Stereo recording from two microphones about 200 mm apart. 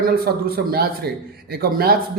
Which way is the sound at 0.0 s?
50° right (ahead or behind).